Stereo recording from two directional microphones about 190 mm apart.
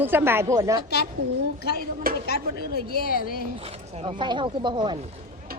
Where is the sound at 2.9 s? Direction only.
50° left (ahead or behind).